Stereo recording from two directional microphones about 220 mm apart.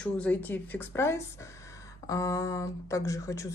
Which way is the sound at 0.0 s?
5° left (ahead or behind).